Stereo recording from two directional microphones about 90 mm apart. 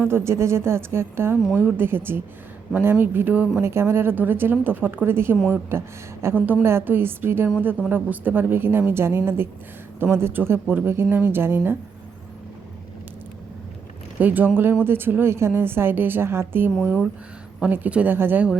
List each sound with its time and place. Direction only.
0.0 s speech: 30° right (ahead or behind)
14.2 s speech: 20° right (ahead or behind)